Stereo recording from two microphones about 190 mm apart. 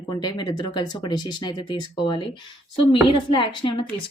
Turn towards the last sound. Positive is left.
turn(degrees=25)  # may be behind; listen again after turning